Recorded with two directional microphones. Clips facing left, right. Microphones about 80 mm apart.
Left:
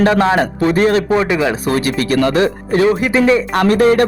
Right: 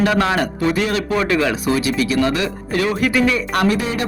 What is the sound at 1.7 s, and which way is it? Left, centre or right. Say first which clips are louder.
Speech: left 2 dB; left.